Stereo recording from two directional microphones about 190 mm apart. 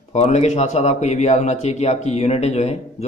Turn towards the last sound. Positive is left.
turn(degrees=35)  # may be behind; listen again after turning